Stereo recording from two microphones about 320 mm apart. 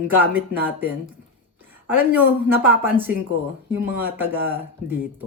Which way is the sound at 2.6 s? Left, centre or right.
Centre.